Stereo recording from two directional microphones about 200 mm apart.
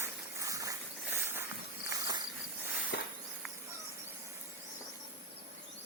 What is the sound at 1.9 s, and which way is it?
Cricket, 20° right (ahead or behind).